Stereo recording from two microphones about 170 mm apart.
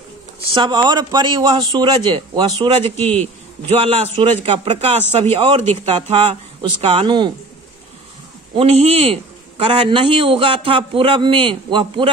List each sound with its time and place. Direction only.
0.6 s a man's voice: 25° right (ahead or behind)
3.0 s a man's voice: 10° left (ahead or behind)
3.8 s a man's voice: 35° right (ahead or behind)
8.5 s a man's voice: 35° right (ahead or behind)